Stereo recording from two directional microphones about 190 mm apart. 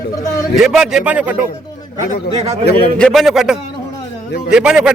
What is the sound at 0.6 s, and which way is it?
Speech, centre (ahead or behind).